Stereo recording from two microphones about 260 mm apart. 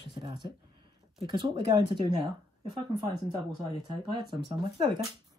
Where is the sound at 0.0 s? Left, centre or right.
Centre.